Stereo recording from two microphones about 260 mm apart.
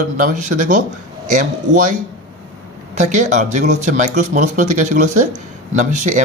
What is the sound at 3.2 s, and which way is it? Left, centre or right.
Speech, right.